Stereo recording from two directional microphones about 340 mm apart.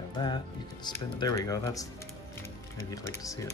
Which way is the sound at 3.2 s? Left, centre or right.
Centre.